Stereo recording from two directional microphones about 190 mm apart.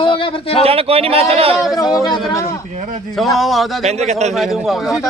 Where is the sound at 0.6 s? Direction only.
30° right (ahead or behind).